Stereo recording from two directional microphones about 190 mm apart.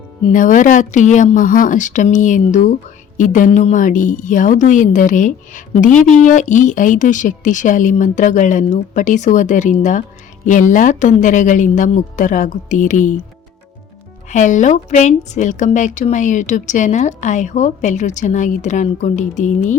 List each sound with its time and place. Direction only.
0.3 s a woman's voice: 45° left (ahead or behind)
14.3 s a woman's voice: 40° left (ahead or behind)